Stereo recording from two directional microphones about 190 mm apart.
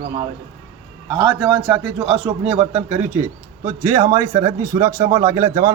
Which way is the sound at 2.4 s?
35° right (ahead or behind).